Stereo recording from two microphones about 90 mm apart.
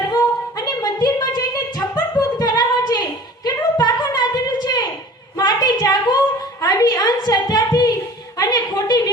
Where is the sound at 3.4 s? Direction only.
50° left (ahead or behind).